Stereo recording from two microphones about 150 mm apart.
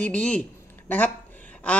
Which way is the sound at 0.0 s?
5° left (ahead or behind).